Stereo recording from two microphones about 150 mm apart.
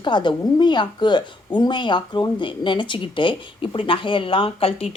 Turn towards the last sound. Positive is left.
turn(degrees=40)  # may be behind; listen again after turning